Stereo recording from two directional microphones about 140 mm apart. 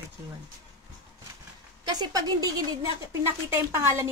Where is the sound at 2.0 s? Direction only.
30° right (ahead or behind).